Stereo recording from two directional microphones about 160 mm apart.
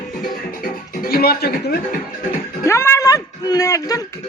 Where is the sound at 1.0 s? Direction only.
70° left (ahead or behind).